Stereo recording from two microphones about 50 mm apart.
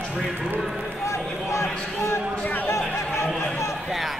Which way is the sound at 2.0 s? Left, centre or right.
Left.